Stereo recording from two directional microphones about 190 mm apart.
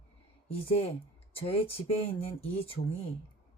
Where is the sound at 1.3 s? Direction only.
30° left (ahead or behind).